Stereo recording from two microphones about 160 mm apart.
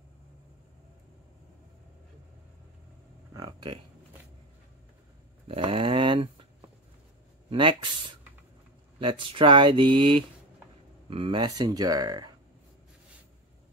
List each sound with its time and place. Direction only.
3.3 s a sound: 25° right (ahead or behind)
5.5 s speech: 35° right (ahead or behind)
7.4 s speech: 35° right (ahead or behind)